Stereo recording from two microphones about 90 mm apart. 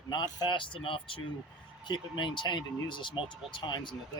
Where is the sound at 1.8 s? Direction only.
60° left (ahead or behind).